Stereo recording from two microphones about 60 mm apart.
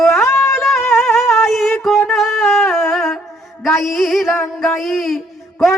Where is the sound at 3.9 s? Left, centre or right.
Centre.